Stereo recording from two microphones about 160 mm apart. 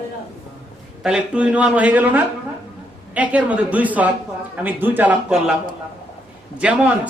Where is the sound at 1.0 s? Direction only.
5° right (ahead or behind).